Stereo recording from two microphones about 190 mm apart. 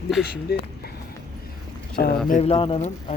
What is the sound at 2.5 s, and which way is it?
Speech, 30° left (ahead or behind).